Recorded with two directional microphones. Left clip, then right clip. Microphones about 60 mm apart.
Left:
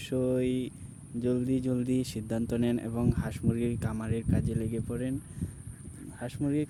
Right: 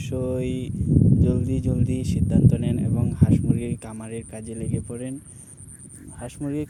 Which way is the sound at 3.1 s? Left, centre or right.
Left.